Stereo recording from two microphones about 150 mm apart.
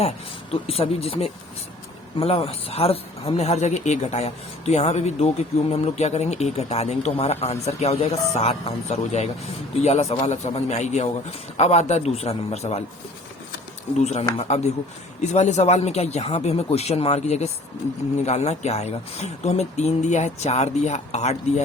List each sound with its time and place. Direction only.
0.5 s a man's voice: 40° left (ahead or behind)
14.0 s a man's voice: 45° left (ahead or behind)